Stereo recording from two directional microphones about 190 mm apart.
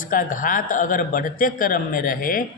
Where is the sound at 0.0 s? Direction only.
45° left (ahead or behind).